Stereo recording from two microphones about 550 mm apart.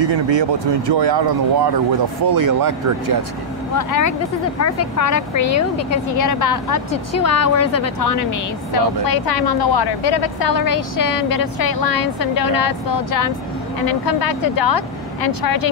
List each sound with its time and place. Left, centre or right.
0.0 s speech: right
3.7 s speech: left